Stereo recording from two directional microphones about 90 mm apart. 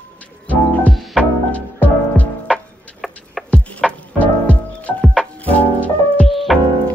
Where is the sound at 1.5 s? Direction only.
15° left (ahead or behind).